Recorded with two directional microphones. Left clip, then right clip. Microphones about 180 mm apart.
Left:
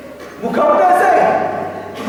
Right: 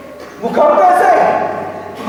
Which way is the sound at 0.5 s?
5° left (ahead or behind).